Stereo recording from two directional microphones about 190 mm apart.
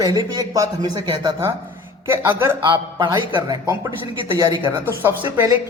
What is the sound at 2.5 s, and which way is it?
A man's voice, 25° right (ahead or behind).